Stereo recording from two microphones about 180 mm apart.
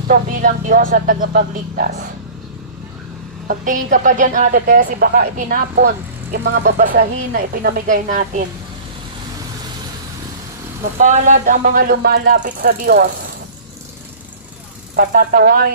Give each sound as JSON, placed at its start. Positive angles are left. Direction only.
{"t": 0.1, "sound": "a man's voice", "side_deg": -50}
{"t": 3.4, "sound": "a man's voice", "side_deg": -45}
{"t": 6.3, "sound": "speech", "side_deg": -70}
{"t": 6.8, "sound": "a man's voice", "side_deg": -55}
{"t": 11.0, "sound": "a man's voice", "side_deg": -45}
{"t": 12.4, "sound": "speech", "side_deg": -50}
{"t": 15.0, "sound": "speech", "side_deg": -55}